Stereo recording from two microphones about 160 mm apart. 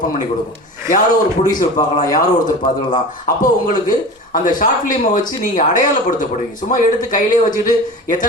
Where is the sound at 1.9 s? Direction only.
60° left (ahead or behind).